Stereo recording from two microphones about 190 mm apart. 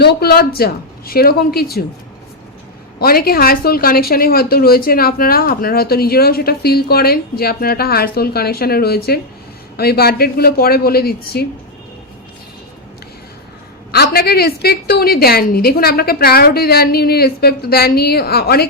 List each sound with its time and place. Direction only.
0.0 s a woman's voice: 60° left (ahead or behind)
3.0 s a woman's voice: 50° left (ahead or behind)
13.9 s a woman's voice: 55° left (ahead or behind)